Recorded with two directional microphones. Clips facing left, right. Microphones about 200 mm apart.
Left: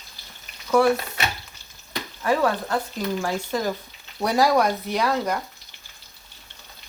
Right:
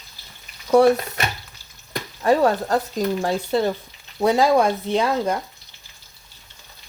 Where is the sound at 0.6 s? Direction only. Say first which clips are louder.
Right 4 dB; 35° right (ahead or behind).